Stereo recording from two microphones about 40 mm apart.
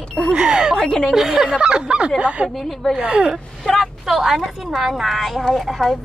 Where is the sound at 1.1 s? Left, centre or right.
Centre.